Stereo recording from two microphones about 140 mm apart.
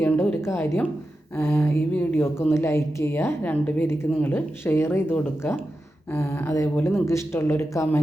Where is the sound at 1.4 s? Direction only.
15° left (ahead or behind).